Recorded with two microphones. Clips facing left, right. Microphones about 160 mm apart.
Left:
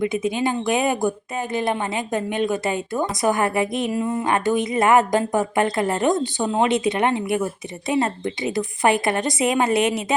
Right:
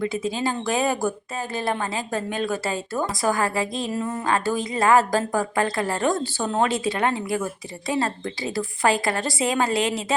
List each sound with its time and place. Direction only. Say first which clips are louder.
0.0 s speech: left 3 dB; 20° left (ahead or behind)